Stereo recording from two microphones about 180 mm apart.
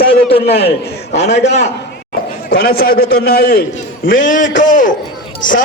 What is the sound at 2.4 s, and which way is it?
A man's voice, 55° left (ahead or behind).